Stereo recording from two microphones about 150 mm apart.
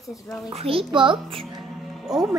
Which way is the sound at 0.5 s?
40° right (ahead or behind).